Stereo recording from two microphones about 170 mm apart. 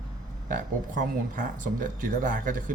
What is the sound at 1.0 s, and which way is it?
Speech, 50° right (ahead or behind).